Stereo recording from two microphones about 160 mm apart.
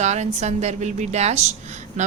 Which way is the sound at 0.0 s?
45° right (ahead or behind).